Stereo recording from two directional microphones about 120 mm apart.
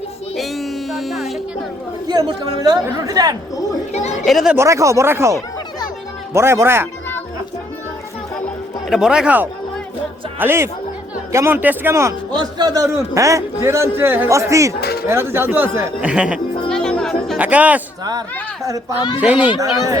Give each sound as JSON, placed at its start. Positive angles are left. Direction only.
{"t": 0.3, "sound": "music", "side_deg": 0}
{"t": 2.0, "sound": "speech", "side_deg": -35}
{"t": 3.9, "sound": "speech", "side_deg": 70}
{"t": 4.3, "sound": "speech", "side_deg": 0}
{"t": 4.5, "sound": "a man's voice", "side_deg": -25}
{"t": 8.9, "sound": "a man's voice", "side_deg": -5}
{"t": 12.4, "sound": "a man's voice", "side_deg": -35}
{"t": 16.0, "sound": "speech", "side_deg": -10}
{"t": 16.6, "sound": "music", "side_deg": 5}
{"t": 17.3, "sound": "speech", "side_deg": -10}
{"t": 18.6, "sound": "a man's voice", "side_deg": -30}
{"t": 18.9, "sound": "speech", "side_deg": 40}
{"t": 19.2, "sound": "speech", "side_deg": -10}